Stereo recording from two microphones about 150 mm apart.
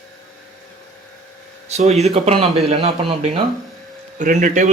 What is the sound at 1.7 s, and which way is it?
Speech, 50° right (ahead or behind).